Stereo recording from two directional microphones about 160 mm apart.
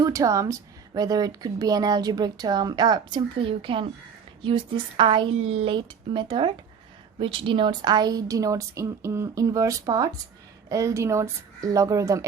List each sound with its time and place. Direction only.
0.0 s a woman's voice: 20° right (ahead or behind)